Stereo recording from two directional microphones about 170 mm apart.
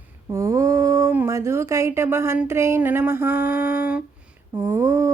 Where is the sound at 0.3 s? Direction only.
20° right (ahead or behind).